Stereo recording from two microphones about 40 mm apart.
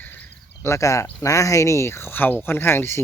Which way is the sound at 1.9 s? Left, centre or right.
Left.